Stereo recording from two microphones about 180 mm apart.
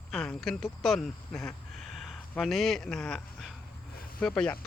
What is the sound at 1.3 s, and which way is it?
Speech, 15° left (ahead or behind).